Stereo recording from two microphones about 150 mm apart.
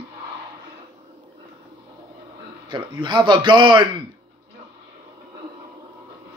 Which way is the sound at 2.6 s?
30° right (ahead or behind).